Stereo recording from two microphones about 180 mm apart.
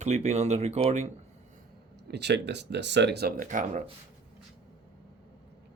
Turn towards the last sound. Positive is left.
turn(degrees=-45)  # may be behind; listen again after turning